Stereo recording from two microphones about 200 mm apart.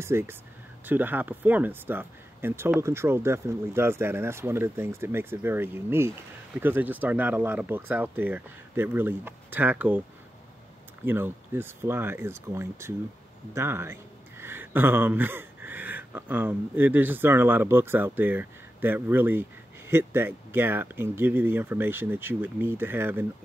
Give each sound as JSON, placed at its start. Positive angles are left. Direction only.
{"t": 0.0, "sound": "speech", "side_deg": -10}
{"t": 11.1, "sound": "a man's voice", "side_deg": -10}